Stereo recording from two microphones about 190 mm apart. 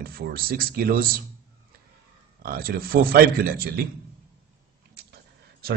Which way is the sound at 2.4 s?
50° right (ahead or behind).